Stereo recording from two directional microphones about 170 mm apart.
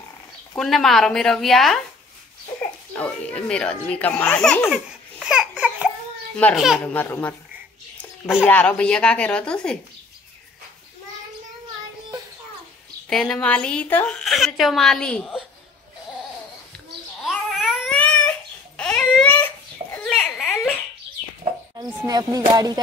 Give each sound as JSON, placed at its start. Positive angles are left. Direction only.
{"t": 0.6, "sound": "a woman's voice", "side_deg": 0}
{"t": 2.9, "sound": "speech", "side_deg": 5}
{"t": 5.2, "sound": "a sound", "side_deg": -5}
{"t": 6.5, "sound": "a woman's voice", "side_deg": 0}
{"t": 6.8, "sound": "speech", "side_deg": 10}
{"t": 8.5, "sound": "speech", "side_deg": 5}
{"t": 13.1, "sound": "a woman's voice", "side_deg": 0}
{"t": 17.2, "sound": "babbling", "side_deg": 0}
{"t": 22.0, "sound": "music", "side_deg": -20}